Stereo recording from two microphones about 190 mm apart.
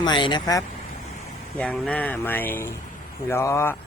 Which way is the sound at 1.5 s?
5° left (ahead or behind).